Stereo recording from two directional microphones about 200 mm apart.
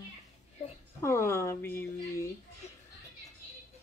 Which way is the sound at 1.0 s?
15° left (ahead or behind).